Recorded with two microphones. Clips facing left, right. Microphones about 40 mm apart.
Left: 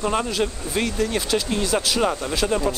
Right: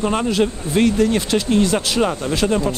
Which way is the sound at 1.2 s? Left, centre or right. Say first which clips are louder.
Right 6 dB; right.